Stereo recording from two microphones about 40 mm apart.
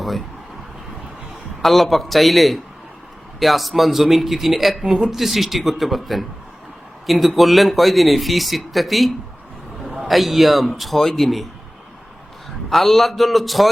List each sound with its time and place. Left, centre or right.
1.6 s speech: centre
12.7 s speech: centre